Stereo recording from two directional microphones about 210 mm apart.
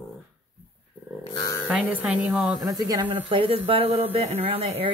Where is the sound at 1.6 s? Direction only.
5° right (ahead or behind).